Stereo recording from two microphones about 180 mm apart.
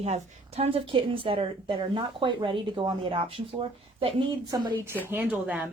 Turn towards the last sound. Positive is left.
turn(degrees=-10)  # may be behind; listen again after turning